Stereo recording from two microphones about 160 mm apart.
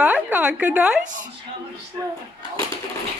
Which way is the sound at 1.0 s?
55° right (ahead or behind).